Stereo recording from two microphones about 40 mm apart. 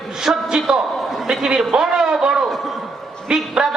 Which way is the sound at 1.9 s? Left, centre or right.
Centre.